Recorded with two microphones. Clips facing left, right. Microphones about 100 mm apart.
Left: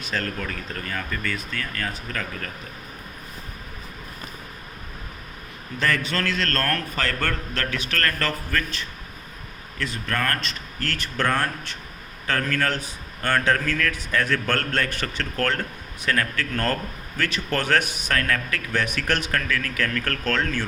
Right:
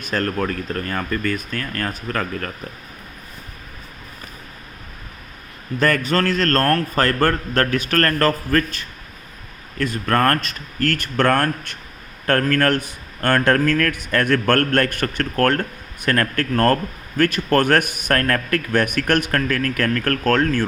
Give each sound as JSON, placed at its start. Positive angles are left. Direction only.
{"t": 0.0, "sound": "speech", "side_deg": -50}
{"t": 5.8, "sound": "speech", "side_deg": -45}